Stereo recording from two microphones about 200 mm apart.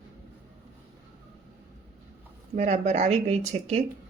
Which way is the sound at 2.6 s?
35° right (ahead or behind).